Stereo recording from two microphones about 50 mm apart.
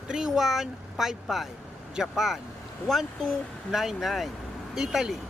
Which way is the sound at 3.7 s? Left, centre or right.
Centre.